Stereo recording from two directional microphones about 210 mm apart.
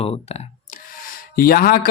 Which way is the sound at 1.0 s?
45° left (ahead or behind).